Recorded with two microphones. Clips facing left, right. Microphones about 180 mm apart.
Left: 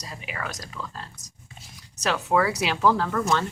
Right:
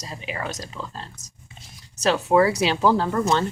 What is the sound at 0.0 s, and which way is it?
Speech, 25° right (ahead or behind).